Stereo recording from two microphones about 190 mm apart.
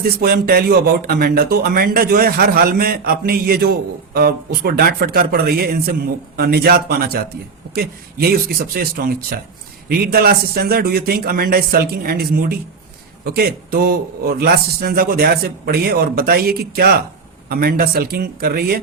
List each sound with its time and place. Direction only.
0.0 s speech: 50° right (ahead or behind)